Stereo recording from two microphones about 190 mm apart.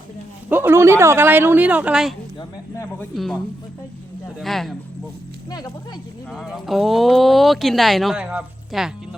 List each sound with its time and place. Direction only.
0.5 s speech: 10° right (ahead or behind)
5.5 s speech: 20° left (ahead or behind)
6.3 s speech: centre (ahead or behind)